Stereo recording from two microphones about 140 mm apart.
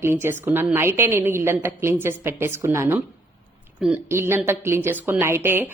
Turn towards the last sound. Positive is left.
turn(degrees=-15)  # may be behind; listen again after turning